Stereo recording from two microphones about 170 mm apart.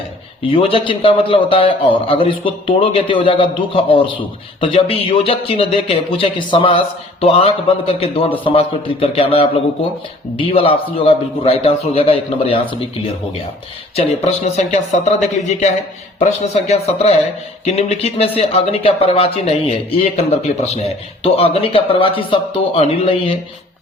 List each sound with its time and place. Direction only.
0.5 s speech: 30° left (ahead or behind)
14.3 s speech: 40° left (ahead or behind)